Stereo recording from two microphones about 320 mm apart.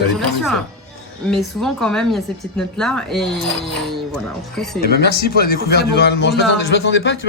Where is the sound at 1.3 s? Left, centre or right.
Centre.